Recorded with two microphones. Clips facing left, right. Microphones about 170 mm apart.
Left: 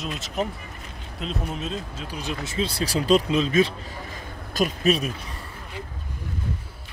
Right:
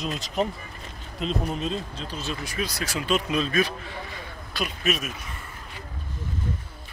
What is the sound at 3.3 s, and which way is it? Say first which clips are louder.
Speech: left 4 dB; 25° left (ahead or behind).